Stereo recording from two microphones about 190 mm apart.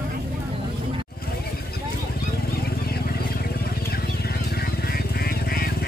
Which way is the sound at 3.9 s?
55° left (ahead or behind).